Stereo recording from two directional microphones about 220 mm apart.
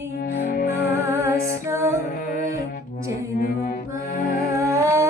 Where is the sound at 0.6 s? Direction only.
10° right (ahead or behind).